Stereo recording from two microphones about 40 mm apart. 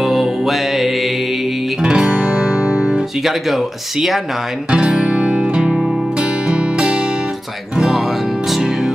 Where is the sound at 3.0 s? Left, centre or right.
Centre.